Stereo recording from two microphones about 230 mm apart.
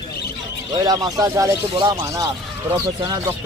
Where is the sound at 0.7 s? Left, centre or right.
Centre.